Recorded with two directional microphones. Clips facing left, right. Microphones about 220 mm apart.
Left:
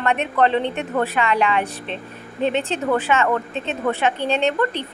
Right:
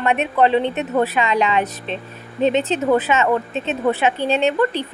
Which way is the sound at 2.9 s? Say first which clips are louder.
Right 2 dB; 20° right (ahead or behind).